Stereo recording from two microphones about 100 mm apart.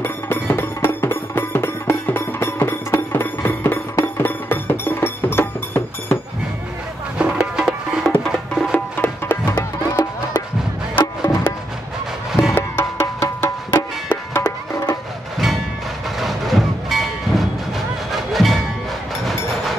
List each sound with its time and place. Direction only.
0.0 s music: 20° left (ahead or behind)
7.2 s music: 5° right (ahead or behind)
8.7 s music: 20° left (ahead or behind)
12.3 s music: centre (ahead or behind)
12.5 s music: 25° left (ahead or behind)
14.4 s music: 35° left (ahead or behind)
16.2 s music: centre (ahead or behind)